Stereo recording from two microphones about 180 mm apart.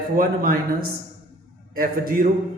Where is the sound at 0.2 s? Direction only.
55° right (ahead or behind).